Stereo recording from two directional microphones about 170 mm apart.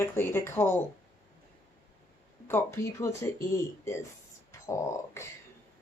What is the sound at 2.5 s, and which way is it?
Speech, 15° left (ahead or behind).